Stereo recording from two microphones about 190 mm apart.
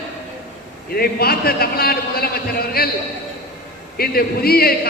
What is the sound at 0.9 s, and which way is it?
A man's voice, 55° left (ahead or behind).